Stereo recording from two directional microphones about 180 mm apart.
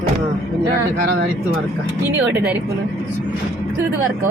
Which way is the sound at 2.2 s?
5° right (ahead or behind).